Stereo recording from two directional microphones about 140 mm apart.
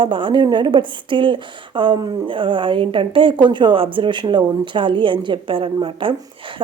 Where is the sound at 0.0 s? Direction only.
35° right (ahead or behind).